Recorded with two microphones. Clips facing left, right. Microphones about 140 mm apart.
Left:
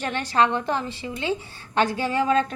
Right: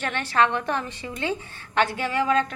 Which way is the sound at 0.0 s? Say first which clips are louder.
Left 1 dB; 15° left (ahead or behind).